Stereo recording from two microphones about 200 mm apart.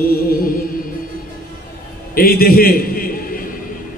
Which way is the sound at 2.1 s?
50° left (ahead or behind).